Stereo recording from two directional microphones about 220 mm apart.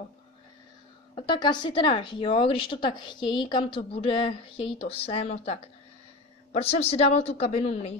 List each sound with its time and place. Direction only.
1.1 s a woman's voice: 20° left (ahead or behind)